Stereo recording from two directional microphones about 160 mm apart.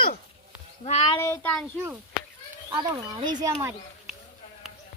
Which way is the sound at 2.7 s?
25° right (ahead or behind).